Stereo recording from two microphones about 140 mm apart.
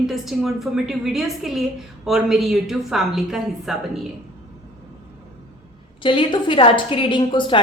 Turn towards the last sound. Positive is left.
turn(degrees=35)  # may be behind; listen again after turning